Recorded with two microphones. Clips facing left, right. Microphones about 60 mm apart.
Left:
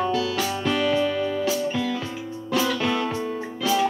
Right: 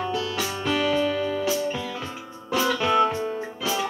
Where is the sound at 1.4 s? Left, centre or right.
Centre.